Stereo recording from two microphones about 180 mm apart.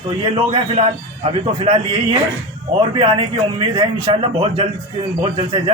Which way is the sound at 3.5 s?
30° right (ahead or behind).